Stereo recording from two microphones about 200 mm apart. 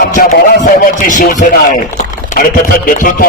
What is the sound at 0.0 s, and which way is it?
A man's voice, 45° left (ahead or behind).